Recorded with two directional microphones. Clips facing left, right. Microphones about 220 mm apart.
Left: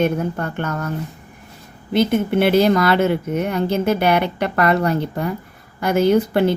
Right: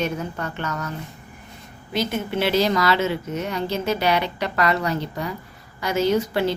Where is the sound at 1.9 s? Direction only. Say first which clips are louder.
Left 8 dB; 55° left (ahead or behind).